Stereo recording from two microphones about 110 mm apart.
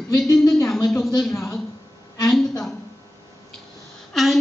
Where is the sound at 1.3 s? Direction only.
25° left (ahead or behind).